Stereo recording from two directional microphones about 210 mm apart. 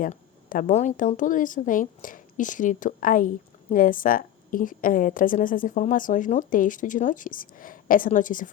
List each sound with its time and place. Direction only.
0.0 s a woman's voice: 35° left (ahead or behind)